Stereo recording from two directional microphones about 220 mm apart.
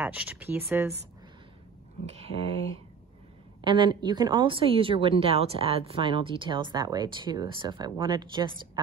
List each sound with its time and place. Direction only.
0.0 s speech: 5° right (ahead or behind)
2.0 s speech: 30° right (ahead or behind)
3.6 s speech: 20° right (ahead or behind)